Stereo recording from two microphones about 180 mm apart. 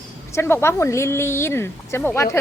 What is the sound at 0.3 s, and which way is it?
A woman's voice, 15° left (ahead or behind).